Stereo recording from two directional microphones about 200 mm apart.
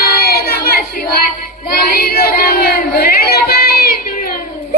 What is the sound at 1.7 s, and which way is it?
Child singing, 50° left (ahead or behind).